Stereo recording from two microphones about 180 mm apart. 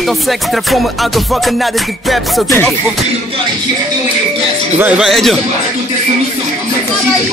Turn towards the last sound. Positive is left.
turn(degrees=0)  # may be behind; listen again after turning